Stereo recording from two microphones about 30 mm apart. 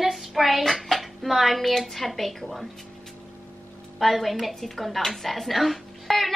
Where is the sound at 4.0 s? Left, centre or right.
Centre.